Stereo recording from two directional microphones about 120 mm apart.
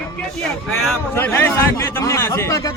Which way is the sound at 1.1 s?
20° left (ahead or behind).